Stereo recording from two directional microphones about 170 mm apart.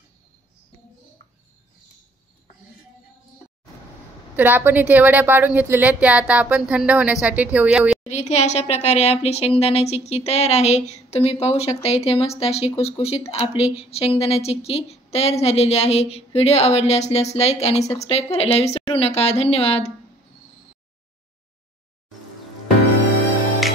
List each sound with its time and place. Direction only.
4.4 s a woman's voice: 10° right (ahead or behind)
8.1 s a woman's voice: 45° left (ahead or behind)